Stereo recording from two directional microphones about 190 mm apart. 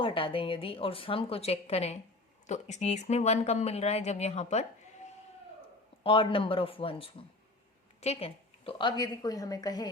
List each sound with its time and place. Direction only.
0.0 s a woman's voice: 30° left (ahead or behind)
6.0 s a woman's voice: 25° left (ahead or behind)